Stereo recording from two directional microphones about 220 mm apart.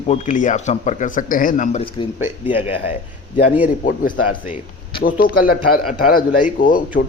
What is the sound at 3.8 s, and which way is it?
Speech, 40° left (ahead or behind).